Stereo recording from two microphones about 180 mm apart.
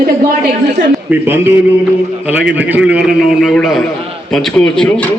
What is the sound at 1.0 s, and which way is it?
A man's voice, 10° right (ahead or behind).